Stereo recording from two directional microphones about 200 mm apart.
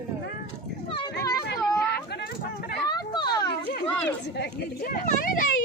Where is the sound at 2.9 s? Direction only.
20° left (ahead or behind).